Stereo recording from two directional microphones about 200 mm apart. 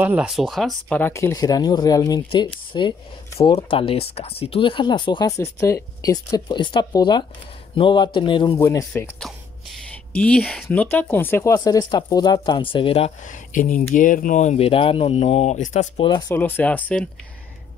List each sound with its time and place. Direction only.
0.0 s speech: 5° right (ahead or behind); by 16.1 s 35° left (ahead or behind)
16.1 s speech: 20° left (ahead or behind)
16.3 s speech: 10° left (ahead or behind)